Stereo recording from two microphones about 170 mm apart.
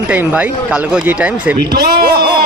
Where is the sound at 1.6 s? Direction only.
70° right (ahead or behind).